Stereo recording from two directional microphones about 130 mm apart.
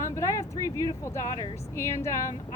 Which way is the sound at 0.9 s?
25° left (ahead or behind).